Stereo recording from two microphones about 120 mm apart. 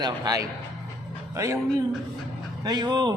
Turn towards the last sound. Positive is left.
turn(degrees=-35)  # may be behind; listen again after turning